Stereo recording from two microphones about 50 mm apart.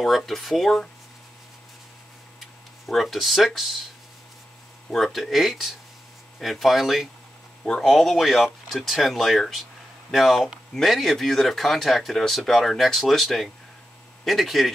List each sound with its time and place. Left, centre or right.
0.0 s speech: centre
2.9 s speech: centre
4.9 s speech: centre